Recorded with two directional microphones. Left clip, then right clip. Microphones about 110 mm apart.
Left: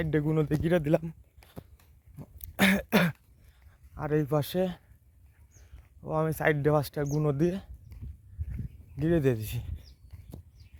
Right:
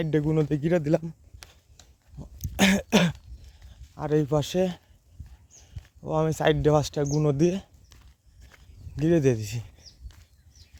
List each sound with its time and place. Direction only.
0.0 s speech: 20° right (ahead or behind)
0.6 s speech: 10° right (ahead or behind)
1.4 s a sound: 15° right (ahead or behind)
2.1 s cough: 20° right (ahead or behind)
2.6 s throat clearing: 30° right (ahead or behind)
3.7 s speech: 25° right (ahead or behind)
6.1 s speech: 50° right (ahead or behind)
9.0 s speech: 45° right (ahead or behind)
9.3 s speech: 25° right (ahead or behind)